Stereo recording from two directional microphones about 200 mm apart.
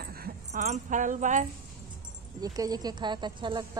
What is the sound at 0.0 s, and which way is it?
Speech, 50° right (ahead or behind).